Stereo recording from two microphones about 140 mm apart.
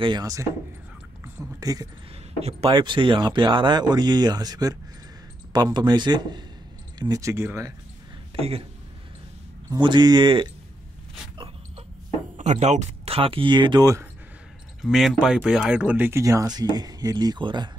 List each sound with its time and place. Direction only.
0.2 s speech: 25° right (ahead or behind)
1.2 s a sound: 25° right (ahead or behind)
2.7 s speech: 35° right (ahead or behind)
8.4 s speech: 45° right (ahead or behind)
9.7 s speech: 30° right (ahead or behind)
11.3 s a sound: 40° right (ahead or behind)
12.4 s speech: 55° right (ahead or behind); by 13.8 s 35° right (ahead or behind)
14.8 s speech: centre (ahead or behind); by 17.6 s 30° right (ahead or behind)